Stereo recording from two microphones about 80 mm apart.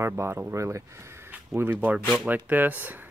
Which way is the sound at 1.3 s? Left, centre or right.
Right.